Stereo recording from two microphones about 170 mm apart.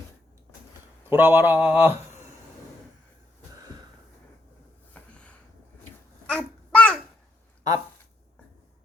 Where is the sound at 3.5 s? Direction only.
20° right (ahead or behind).